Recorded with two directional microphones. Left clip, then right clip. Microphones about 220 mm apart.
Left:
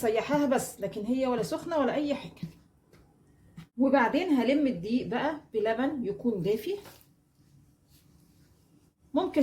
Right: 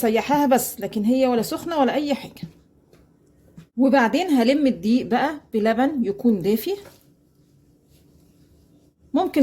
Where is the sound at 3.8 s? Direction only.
50° right (ahead or behind).